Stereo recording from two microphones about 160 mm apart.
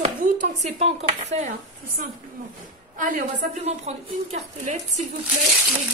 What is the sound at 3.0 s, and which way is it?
Speech, 50° right (ahead or behind).